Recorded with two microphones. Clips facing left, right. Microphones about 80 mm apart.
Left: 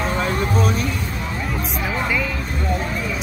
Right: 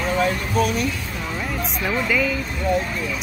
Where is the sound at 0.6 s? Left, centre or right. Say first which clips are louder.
Right 4 dB; left.